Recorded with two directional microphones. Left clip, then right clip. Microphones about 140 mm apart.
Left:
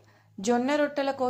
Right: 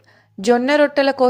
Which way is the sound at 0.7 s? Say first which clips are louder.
Right 11 dB; 40° right (ahead or behind).